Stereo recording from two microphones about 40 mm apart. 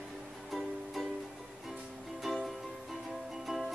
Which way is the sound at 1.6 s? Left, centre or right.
Centre.